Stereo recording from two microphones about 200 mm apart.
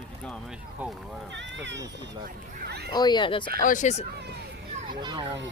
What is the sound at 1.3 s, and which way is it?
Speech, 65° right (ahead or behind).